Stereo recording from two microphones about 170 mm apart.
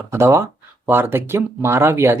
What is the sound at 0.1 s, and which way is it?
Speech, 15° right (ahead or behind).